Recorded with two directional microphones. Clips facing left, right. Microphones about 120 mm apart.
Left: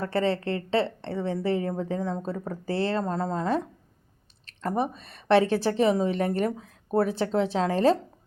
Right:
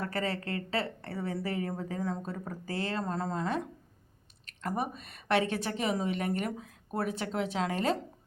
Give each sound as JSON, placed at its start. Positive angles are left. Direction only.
{"t": 0.0, "sound": "a woman's voice", "side_deg": 30}